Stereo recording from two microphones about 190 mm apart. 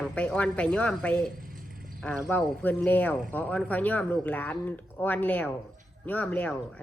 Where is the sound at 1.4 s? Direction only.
45° right (ahead or behind).